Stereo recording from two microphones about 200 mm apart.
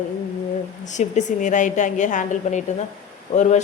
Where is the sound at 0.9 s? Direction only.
35° left (ahead or behind).